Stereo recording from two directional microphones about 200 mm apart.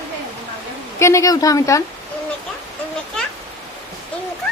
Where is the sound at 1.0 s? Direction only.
15° left (ahead or behind).